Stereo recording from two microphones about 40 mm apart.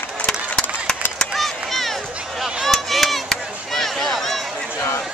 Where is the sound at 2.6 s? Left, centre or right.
Centre.